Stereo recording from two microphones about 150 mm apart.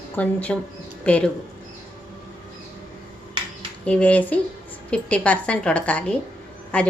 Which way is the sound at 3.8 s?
10° left (ahead or behind).